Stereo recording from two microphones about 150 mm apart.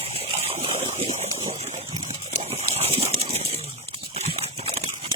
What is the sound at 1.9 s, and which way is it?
Horse, 40° right (ahead or behind).